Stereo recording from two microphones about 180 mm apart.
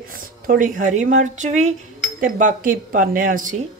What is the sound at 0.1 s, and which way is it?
Speech, 50° right (ahead or behind).